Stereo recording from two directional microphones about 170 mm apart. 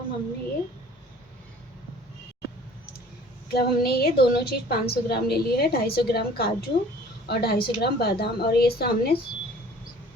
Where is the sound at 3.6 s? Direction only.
65° left (ahead or behind).